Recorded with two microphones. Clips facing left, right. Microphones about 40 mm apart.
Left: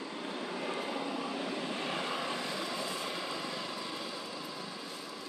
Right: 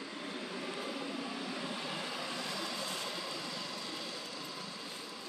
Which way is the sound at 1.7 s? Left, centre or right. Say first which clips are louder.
Left 4 dB; left.